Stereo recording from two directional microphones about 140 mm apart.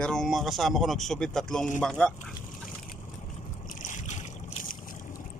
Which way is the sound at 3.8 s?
60° left (ahead or behind).